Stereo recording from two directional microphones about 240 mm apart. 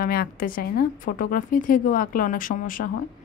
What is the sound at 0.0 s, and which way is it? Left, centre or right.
A woman's voice, left.